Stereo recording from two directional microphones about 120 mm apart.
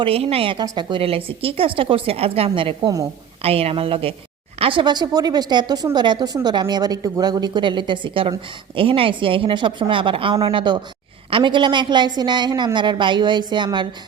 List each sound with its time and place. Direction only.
0.0 s a woman's voice: 55° right (ahead or behind)
0.6 s a woman's voice: 40° right (ahead or behind)
2.8 s a woman's voice: 30° right (ahead or behind)
3.4 s a woman's voice: 55° right (ahead or behind); by 13.8 s 40° right (ahead or behind)